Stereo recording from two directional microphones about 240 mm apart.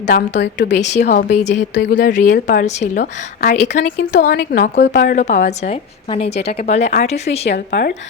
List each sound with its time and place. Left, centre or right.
0.1 s a woman's voice: left
0.8 s speech: left
1.7 s a woman's voice: left
2.0 s a woman's voice: left
7.7 s a woman's voice: left